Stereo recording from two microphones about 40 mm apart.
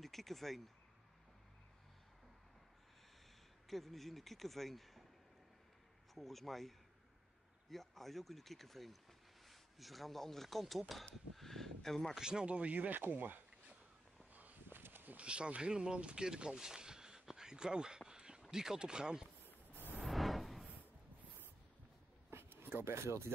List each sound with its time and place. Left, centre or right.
0.0 s speech: centre
3.6 s speech: centre
6.1 s speech: centre
7.7 s speech: centre
11.3 s a sound: centre
12.2 s speech: centre
12.7 s speech: right
14.3 s walk: right
14.8 s a sound: right
15.1 s speech: right
20.1 s music: centre
22.3 s a sound: right